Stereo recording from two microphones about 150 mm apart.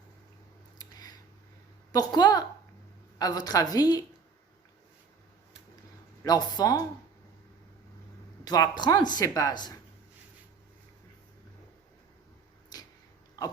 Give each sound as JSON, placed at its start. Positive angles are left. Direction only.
{"t": 0.8, "sound": "a sound", "side_deg": 25}
{"t": 1.9, "sound": "speech", "side_deg": 25}
{"t": 6.2, "sound": "speech", "side_deg": 25}
{"t": 8.4, "sound": "speech", "side_deg": 25}
{"t": 12.7, "sound": "a sound", "side_deg": 25}
{"t": 13.4, "sound": "pig", "side_deg": 25}